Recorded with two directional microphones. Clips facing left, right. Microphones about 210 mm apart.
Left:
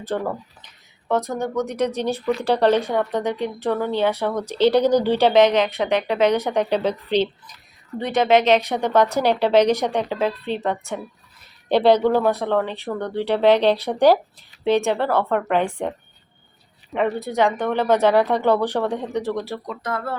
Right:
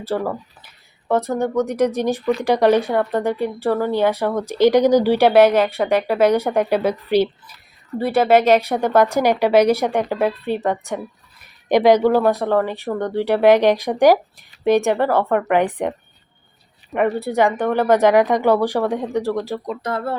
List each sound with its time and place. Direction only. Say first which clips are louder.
0.3 s a sound: right 2 dB; 10° right (ahead or behind)
1.3 s speech: right 4 dB; 15° right (ahead or behind)
17.2 s speech: right 3 dB; 15° right (ahead or behind)
19.8 s speech: right 2 dB; 30° right (ahead or behind)